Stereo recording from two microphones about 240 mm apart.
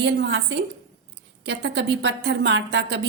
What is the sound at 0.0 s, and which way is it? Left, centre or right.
A woman's voice, right.